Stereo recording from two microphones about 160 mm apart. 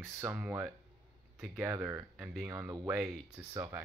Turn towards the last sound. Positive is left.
turn(degrees=-15)  # may be behind; listen again after turning